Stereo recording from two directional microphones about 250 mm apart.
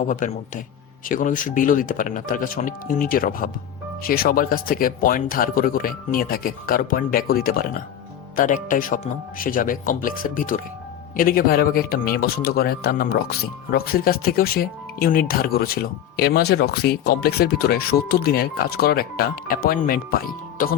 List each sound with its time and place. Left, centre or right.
0.1 s speech: left